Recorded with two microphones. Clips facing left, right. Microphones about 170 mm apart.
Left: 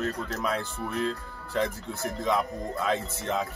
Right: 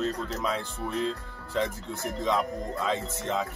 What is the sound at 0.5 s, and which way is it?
Speech, 20° right (ahead or behind).